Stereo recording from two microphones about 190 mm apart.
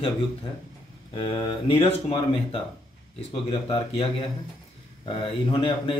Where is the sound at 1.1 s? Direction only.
25° left (ahead or behind).